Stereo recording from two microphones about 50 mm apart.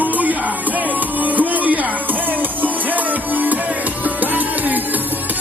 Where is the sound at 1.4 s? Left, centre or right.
Right.